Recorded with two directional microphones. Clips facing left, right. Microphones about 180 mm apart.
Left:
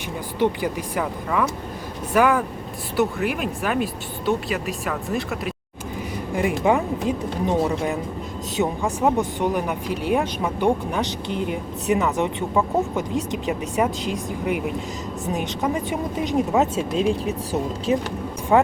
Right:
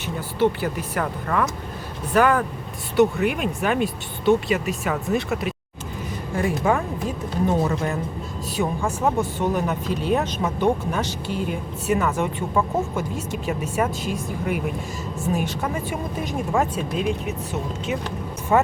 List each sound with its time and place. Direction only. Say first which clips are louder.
0.3 s speech: right 1 dB; 15° left (ahead or behind)
6.3 s speech: left 2 dB; 15° left (ahead or behind)
8.5 s speech: left 1 dB; 20° left (ahead or behind)
18.5 s speech: left 2 dB; 10° left (ahead or behind)